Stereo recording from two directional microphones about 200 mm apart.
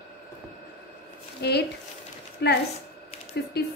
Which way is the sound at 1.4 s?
55° left (ahead or behind).